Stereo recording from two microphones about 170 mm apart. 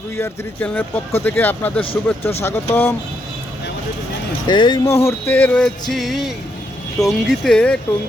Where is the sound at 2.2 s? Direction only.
35° left (ahead or behind).